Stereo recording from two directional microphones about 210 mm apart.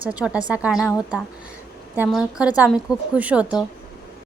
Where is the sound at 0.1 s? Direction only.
5° right (ahead or behind).